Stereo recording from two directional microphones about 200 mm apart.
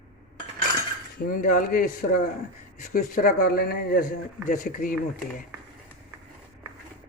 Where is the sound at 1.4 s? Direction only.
40° left (ahead or behind).